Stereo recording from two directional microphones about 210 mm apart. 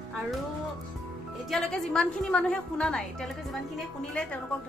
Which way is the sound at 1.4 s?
Centre (ahead or behind).